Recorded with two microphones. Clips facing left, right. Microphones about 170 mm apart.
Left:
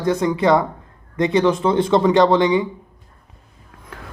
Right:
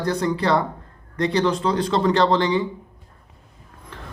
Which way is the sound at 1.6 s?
25° left (ahead or behind).